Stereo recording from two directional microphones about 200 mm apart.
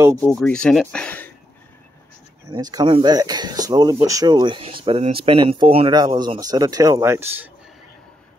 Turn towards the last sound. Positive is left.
turn(degrees=-15)  # may be behind; listen again after turning